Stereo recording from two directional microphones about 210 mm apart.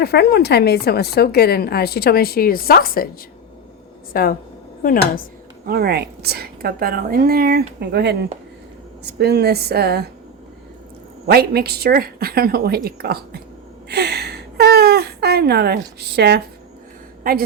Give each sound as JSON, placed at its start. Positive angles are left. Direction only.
{"t": 0.0, "sound": "a woman's voice", "side_deg": 50}
{"t": 4.1, "sound": "a woman's voice", "side_deg": 45}
{"t": 5.6, "sound": "a woman's voice", "side_deg": -45}
{"t": 11.3, "sound": "a woman's voice", "side_deg": -50}
{"t": 13.8, "sound": "a sound", "side_deg": -50}
{"t": 17.2, "sound": "a woman's voice", "side_deg": -45}